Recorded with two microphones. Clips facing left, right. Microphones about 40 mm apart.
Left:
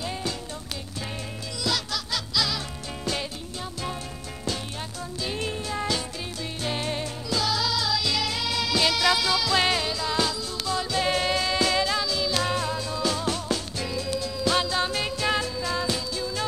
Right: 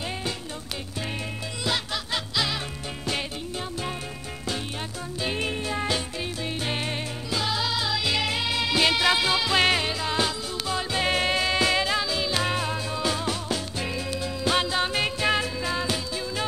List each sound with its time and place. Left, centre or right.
1.6 s music: right
5.2 s music: right